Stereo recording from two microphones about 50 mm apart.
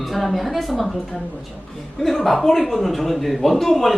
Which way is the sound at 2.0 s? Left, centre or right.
Centre.